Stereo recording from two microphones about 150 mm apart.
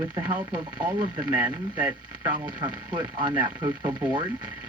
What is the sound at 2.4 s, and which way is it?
Speech, 30° right (ahead or behind).